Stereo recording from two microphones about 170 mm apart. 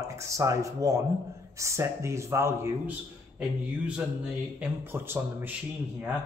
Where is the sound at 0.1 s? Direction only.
20° right (ahead or behind).